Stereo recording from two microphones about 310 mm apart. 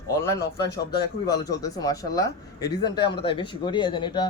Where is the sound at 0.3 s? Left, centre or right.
Centre.